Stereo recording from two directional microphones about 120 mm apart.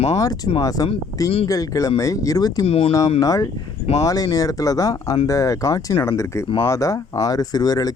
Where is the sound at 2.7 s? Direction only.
55° left (ahead or behind).